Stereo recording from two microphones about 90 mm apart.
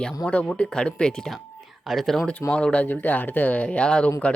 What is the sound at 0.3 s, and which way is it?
Speech, 15° left (ahead or behind).